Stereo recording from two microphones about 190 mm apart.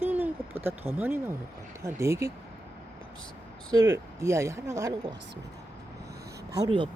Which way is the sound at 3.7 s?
20° right (ahead or behind).